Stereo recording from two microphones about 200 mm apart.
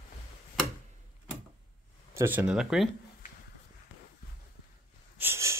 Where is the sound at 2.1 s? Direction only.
10° right (ahead or behind).